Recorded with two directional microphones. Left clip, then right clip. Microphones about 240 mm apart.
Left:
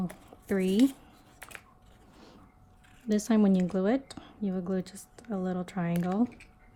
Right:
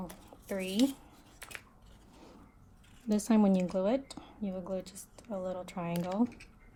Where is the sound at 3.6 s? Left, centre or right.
Left.